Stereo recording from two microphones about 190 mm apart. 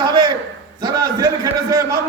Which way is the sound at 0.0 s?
20° right (ahead or behind).